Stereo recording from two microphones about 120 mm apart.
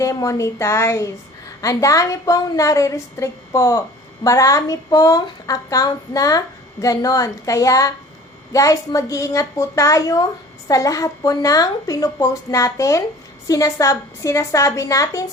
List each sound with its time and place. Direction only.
0.0 s a woman's voice: 25° left (ahead or behind)